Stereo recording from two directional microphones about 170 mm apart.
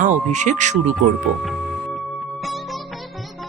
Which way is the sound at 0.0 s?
45° right (ahead or behind).